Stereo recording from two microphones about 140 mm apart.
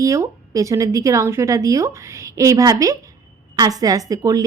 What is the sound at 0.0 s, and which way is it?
A woman's voice, 25° right (ahead or behind).